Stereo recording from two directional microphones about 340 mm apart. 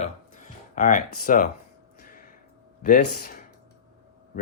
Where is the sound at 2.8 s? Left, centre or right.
Left.